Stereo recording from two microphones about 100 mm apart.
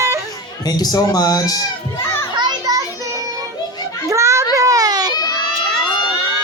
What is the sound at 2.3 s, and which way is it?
Children playing, 40° right (ahead or behind).